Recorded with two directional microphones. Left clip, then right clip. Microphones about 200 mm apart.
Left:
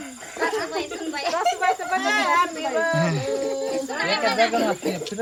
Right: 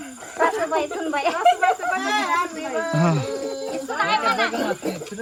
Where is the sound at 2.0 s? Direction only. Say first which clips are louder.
Left 2 dB; centre (ahead or behind).